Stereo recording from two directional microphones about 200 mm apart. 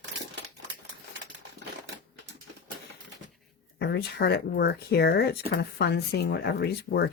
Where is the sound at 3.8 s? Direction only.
50° left (ahead or behind).